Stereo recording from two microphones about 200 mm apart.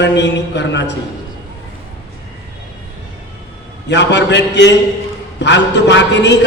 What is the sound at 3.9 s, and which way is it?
A man's voice, 60° left (ahead or behind).